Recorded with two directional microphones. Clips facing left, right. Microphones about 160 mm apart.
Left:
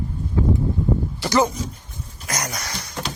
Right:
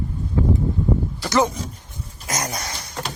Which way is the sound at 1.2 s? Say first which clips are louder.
Left 1 dB; centre (ahead or behind).